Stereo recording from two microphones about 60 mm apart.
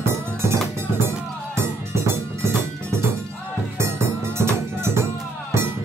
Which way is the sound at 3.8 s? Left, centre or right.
Right.